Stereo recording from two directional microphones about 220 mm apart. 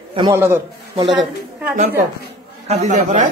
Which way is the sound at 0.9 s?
20° right (ahead or behind).